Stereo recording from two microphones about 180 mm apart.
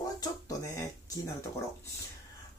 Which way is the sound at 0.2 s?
20° left (ahead or behind).